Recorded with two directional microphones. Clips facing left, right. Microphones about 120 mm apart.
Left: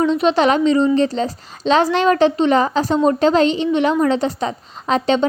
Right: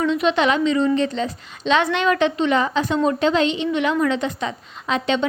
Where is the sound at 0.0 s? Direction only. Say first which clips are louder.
Left 4 dB; 35° left (ahead or behind).